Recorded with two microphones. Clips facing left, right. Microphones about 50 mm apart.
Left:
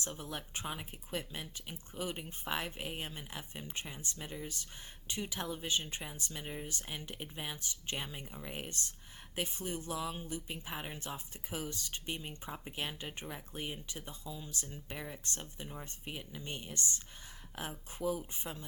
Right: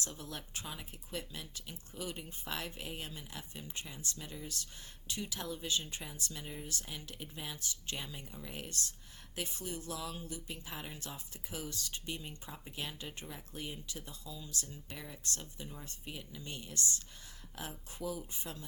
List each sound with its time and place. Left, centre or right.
0.0 s speech: left